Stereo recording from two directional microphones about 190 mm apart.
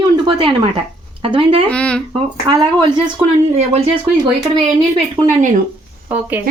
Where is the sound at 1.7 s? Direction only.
5° left (ahead or behind).